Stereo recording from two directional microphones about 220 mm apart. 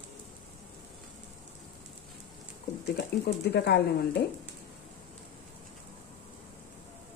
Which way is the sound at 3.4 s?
50° left (ahead or behind).